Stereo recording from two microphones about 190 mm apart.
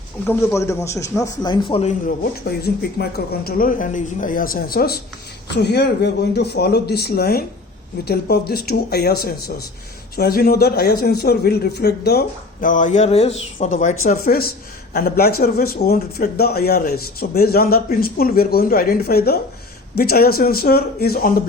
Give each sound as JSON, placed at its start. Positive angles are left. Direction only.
{"t": 0.3, "sound": "a man's voice", "side_deg": 15}
{"t": 3.0, "sound": "a man's voice", "side_deg": 55}
{"t": 14.0, "sound": "speech", "side_deg": 50}